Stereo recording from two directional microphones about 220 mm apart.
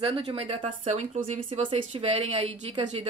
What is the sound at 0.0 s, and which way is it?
Speech, 25° right (ahead or behind).